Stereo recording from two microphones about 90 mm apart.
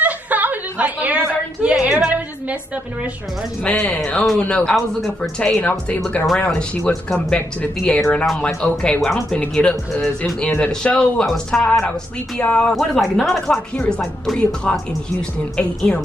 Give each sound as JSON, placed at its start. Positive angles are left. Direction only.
{"t": 0.0, "sound": "a sound", "side_deg": -20}
{"t": 3.6, "sound": "speech", "side_deg": 15}
{"t": 4.7, "sound": "speech", "side_deg": 0}
{"t": 5.4, "sound": "speech", "side_deg": 15}
{"t": 8.3, "sound": "speech", "side_deg": 5}
{"t": 12.7, "sound": "speech", "side_deg": 0}
{"t": 13.7, "sound": "speech", "side_deg": 15}